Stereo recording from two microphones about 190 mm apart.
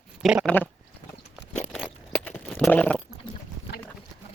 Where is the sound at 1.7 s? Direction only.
5° left (ahead or behind).